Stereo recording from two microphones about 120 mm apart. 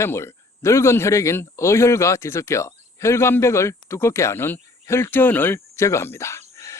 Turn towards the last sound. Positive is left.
turn(degrees=20)  # may be behind; listen again after turning